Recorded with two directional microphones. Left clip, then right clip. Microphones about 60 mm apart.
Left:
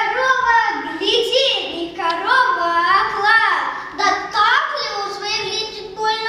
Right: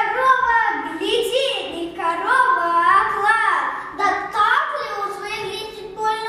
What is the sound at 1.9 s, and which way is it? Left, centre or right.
Child singing, right.